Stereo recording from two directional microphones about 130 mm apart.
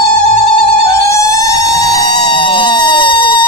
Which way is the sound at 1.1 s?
25° left (ahead or behind).